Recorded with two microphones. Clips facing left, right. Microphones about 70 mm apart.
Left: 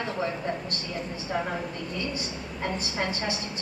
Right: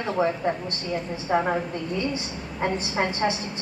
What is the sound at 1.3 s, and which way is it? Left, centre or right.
Speech, right.